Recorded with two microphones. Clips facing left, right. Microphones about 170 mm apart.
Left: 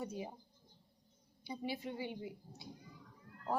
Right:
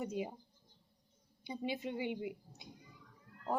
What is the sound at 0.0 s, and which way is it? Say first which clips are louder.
Speech: right 4 dB; 20° right (ahead or behind).